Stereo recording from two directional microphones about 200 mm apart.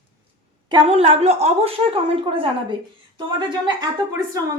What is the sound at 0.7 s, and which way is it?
A woman's voice, 30° right (ahead or behind).